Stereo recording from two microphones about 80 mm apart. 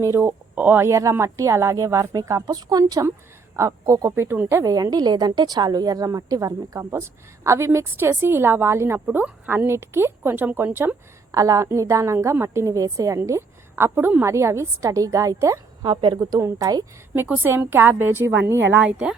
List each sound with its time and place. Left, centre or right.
0.0 s speech: right
0.9 s a woman's voice: right
3.5 s speech: right
4.1 s a woman's voice: right
4.7 s a woman's voice: right
11.3 s a woman's voice: right
15.8 s speech: right
16.6 s speech: right
17.6 s speech: right
18.8 s a woman's voice: centre